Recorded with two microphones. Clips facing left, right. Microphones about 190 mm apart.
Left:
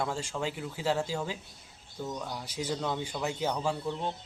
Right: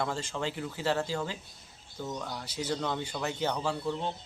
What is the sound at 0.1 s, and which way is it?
Speech, 10° left (ahead or behind).